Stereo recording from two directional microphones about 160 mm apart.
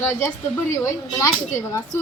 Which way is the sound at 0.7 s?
20° left (ahead or behind).